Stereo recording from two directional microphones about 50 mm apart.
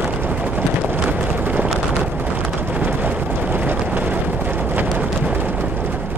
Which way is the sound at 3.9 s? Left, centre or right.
Right.